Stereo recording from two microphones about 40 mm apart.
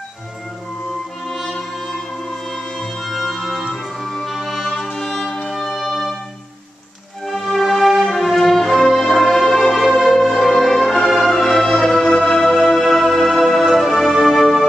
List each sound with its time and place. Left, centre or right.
1.3 s music: centre
7.2 s music: centre